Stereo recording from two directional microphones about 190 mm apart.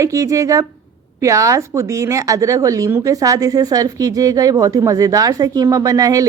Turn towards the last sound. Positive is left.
turn(degrees=-20)  # may be behind; listen again after turning